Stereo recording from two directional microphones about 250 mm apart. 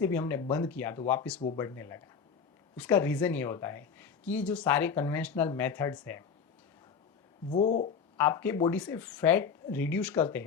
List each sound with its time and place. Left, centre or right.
0.0 s speech: centre
7.5 s speech: left
8.1 s speech: centre